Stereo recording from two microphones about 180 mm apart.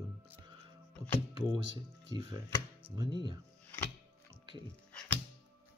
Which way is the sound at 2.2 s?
20° right (ahead or behind).